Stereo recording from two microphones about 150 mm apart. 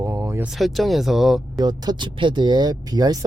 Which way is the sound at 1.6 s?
25° right (ahead or behind).